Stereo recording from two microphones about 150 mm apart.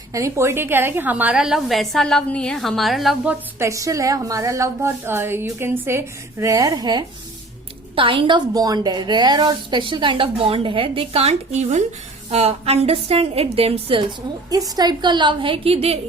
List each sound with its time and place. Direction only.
0.1 s a woman's voice: 20° right (ahead or behind); by 3.3 s centre (ahead or behind)
3.6 s a woman's voice: 20° right (ahead or behind); by 14.0 s 40° right (ahead or behind)
14.5 s a woman's voice: 25° right (ahead or behind); by 16.0 s 40° right (ahead or behind)